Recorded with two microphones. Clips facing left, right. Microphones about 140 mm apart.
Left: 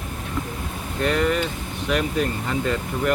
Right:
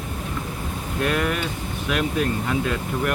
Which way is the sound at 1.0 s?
5° right (ahead or behind).